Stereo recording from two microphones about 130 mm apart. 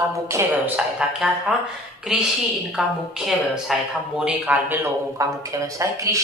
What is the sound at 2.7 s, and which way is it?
A woman's voice, 5° right (ahead or behind).